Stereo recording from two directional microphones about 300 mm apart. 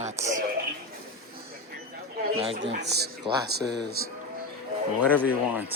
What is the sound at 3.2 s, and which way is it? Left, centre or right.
Speech, centre.